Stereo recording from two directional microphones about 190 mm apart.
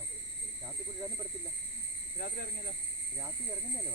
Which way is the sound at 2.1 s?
55° left (ahead or behind).